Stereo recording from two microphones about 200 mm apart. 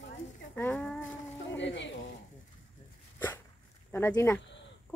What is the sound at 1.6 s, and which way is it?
Speech, 65° left (ahead or behind).